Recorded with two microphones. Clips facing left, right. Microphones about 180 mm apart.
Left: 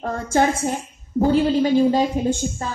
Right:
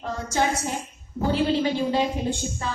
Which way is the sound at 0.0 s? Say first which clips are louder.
Left 6 dB; 55° left (ahead or behind).